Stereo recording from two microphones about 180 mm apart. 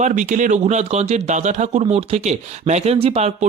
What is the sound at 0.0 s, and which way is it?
Speech, 40° right (ahead or behind).